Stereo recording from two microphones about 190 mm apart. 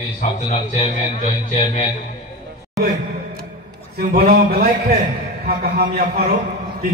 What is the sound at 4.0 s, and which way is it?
A man's voice, 50° right (ahead or behind).